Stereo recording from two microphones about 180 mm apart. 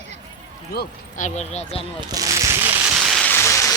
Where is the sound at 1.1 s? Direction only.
40° left (ahead or behind).